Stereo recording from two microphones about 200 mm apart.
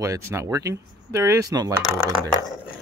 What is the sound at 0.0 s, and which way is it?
Speech, 15° right (ahead or behind).